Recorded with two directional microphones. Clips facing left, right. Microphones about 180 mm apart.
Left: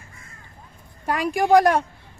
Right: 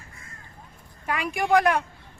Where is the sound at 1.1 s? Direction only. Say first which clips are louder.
Left 5 dB; 40° left (ahead or behind).